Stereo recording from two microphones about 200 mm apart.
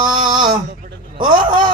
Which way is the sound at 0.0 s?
20° right (ahead or behind).